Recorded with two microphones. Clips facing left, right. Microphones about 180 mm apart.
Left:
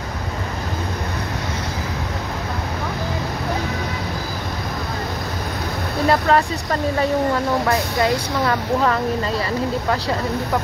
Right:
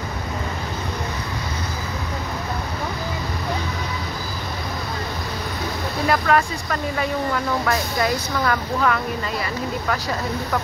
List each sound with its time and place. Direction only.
6.0 s speech: 30° left (ahead or behind)